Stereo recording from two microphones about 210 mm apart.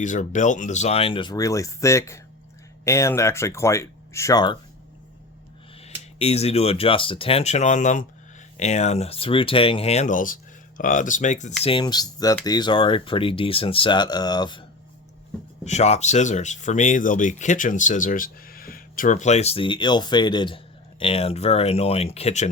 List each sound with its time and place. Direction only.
0.0 s speech: 35° left (ahead or behind); by 4.5 s 15° left (ahead or behind)
6.1 s speech: 30° left (ahead or behind)
11.6 s speech: 25° left (ahead or behind)
15.6 s speech: 30° left (ahead or behind)